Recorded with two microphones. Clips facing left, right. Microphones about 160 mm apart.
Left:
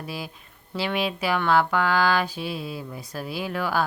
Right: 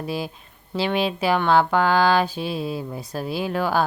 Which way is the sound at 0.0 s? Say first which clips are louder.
Right 6 dB; 25° right (ahead or behind).